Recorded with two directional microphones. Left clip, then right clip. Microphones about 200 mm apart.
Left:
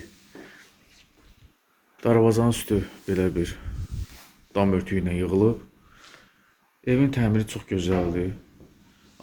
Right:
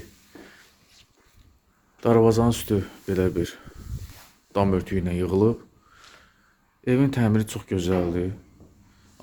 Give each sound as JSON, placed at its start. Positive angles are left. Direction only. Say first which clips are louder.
{"t": 2.0, "sound": "speech", "louder": "right 1 dB", "side_deg": -20}
{"t": 6.8, "sound": "speech", "louder": "right 1 dB", "side_deg": -30}